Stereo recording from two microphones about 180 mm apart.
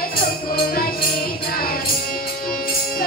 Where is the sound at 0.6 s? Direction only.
55° left (ahead or behind).